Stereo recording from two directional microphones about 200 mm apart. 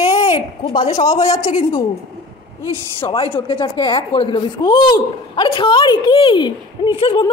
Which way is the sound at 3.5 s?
20° left (ahead or behind).